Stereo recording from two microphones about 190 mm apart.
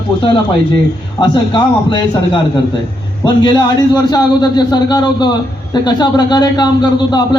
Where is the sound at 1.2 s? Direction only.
25° left (ahead or behind).